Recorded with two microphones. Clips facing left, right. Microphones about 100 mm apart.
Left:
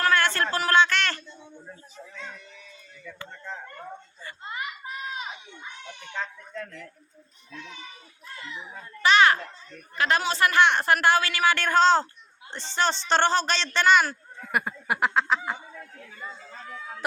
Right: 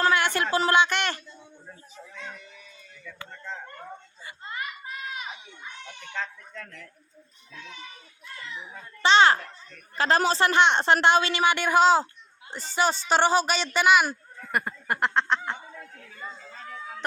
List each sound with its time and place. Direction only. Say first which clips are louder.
0.0 s a sound: even; 15° right (ahead or behind)
3.1 s speech: even; 5° left (ahead or behind)
4.4 s children playing: left 1 dB; 20° left (ahead or behind)
6.1 s speech: left 1 dB; 10° left (ahead or behind)
9.0 s speech: right 1 dB; 30° right (ahead or behind); by 14.2 s 10° right (ahead or behind)
14.4 s speech: left 1 dB; 5° left (ahead or behind)